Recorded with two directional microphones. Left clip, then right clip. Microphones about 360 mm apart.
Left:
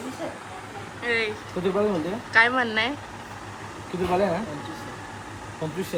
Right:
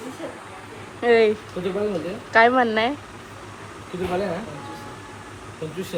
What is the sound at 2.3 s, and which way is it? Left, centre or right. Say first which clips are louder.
Speech: right 4 dB; centre.